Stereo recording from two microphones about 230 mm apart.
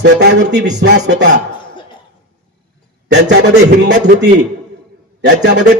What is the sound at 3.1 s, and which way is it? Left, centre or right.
Music, right.